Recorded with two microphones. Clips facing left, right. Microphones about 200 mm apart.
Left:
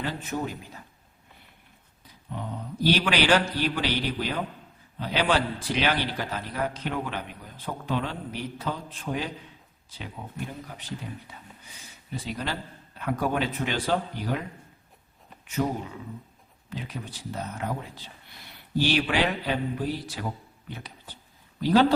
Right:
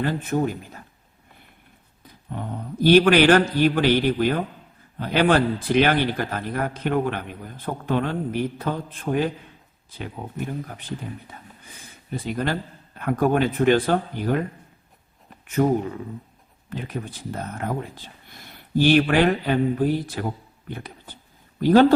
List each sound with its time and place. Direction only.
0.0 s a man's voice: 50° right (ahead or behind)
2.0 s a man's voice: 50° right (ahead or behind)
15.4 s a man's voice: 55° right (ahead or behind)
20.7 s a sound: 55° right (ahead or behind)
21.6 s a man's voice: 50° right (ahead or behind)